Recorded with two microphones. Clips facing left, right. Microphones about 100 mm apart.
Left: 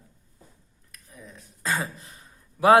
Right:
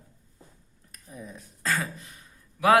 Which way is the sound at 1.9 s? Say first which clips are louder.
Even; 30° left (ahead or behind).